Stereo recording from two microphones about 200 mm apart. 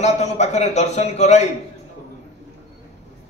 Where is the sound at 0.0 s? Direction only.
35° left (ahead or behind).